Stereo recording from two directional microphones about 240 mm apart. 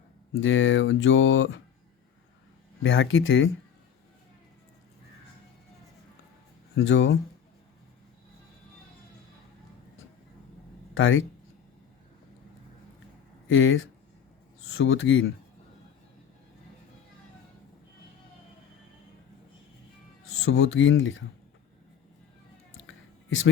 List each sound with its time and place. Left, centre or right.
0.3 s speech: left
2.8 s speech: left
6.7 s speech: left
10.9 s speech: left
13.5 s speech: left
20.4 s speech: left
22.9 s a sound: left